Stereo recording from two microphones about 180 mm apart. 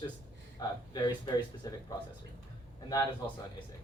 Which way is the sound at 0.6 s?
25° left (ahead or behind).